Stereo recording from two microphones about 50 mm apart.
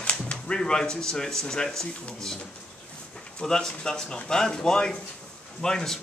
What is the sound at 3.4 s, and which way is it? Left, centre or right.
Speech, centre.